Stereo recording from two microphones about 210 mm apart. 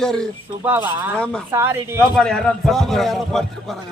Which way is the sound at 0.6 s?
10° right (ahead or behind).